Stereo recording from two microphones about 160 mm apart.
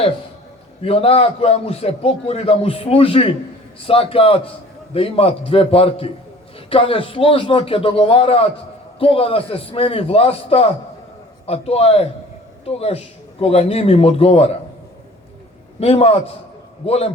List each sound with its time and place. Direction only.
0.8 s a man's voice: 35° left (ahead or behind)
15.8 s a man's voice: 40° left (ahead or behind)